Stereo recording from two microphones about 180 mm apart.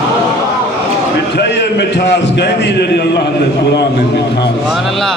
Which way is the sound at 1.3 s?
65° left (ahead or behind).